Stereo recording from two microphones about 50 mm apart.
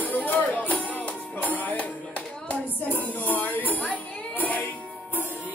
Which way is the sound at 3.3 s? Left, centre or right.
Left.